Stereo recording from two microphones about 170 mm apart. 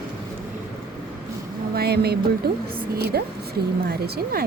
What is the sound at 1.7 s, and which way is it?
Speech, 70° right (ahead or behind).